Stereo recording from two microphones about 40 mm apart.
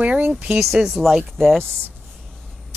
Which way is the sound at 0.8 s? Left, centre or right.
Centre.